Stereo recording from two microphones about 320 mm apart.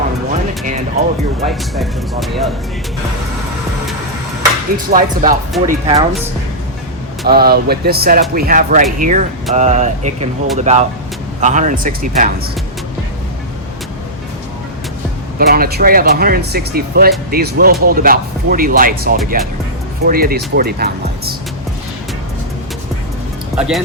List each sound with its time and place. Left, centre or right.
1.5 s speech: centre
4.9 s speech: right
7.3 s speech: right
15.4 s speech: right
23.6 s speech: centre